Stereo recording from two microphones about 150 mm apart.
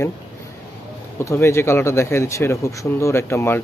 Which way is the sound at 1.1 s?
20° left (ahead or behind).